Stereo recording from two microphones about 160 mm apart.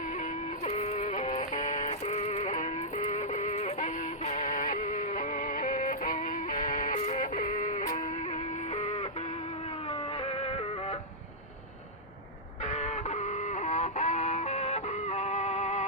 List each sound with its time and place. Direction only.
0.6 s synthetic singing: 45° left (ahead or behind)
7.0 s music: 50° left (ahead or behind)
12.6 s music: 45° left (ahead or behind)